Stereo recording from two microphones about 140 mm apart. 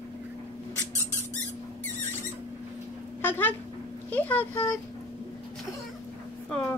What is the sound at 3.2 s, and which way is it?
Speech, 15° left (ahead or behind).